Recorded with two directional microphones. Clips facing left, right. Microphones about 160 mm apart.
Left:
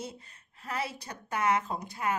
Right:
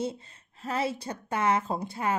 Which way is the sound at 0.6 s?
25° right (ahead or behind).